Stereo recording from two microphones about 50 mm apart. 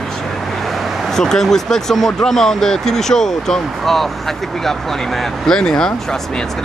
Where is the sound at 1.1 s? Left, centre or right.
Centre.